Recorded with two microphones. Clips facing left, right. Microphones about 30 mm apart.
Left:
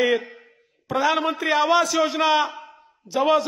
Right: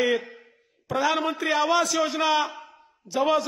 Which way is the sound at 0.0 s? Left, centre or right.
Centre.